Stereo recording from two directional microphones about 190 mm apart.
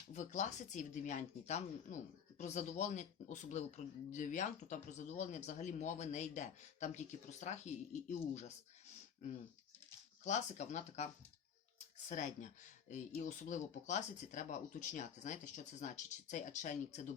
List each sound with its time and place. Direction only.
0.1 s speech: 40° left (ahead or behind)
10.2 s speech: 40° left (ahead or behind)